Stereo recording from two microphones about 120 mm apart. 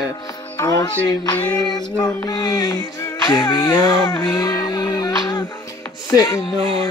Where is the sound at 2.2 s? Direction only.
30° left (ahead or behind).